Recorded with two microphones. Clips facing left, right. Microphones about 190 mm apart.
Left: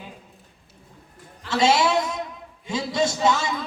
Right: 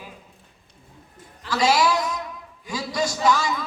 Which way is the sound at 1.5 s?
25° left (ahead or behind).